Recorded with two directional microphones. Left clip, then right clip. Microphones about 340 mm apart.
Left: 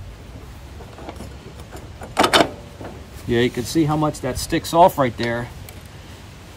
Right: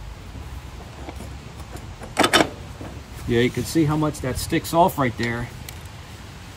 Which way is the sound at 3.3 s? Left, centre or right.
Centre.